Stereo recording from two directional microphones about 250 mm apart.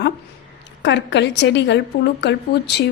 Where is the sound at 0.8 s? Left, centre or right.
Left.